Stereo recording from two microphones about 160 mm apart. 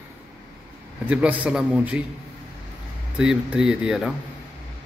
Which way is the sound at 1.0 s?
10° right (ahead or behind).